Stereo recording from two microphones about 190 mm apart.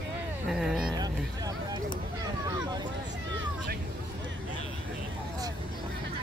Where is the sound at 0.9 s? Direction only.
20° right (ahead or behind).